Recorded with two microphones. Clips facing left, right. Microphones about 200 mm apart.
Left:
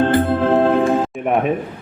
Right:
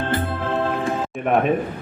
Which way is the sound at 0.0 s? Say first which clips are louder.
Left 9 dB; 55° left (ahead or behind).